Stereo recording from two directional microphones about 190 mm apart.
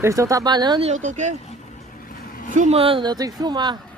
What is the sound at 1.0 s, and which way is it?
Speech, 40° right (ahead or behind).